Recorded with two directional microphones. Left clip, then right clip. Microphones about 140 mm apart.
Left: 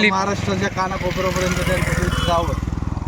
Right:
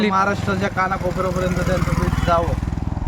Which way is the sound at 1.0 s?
80° right.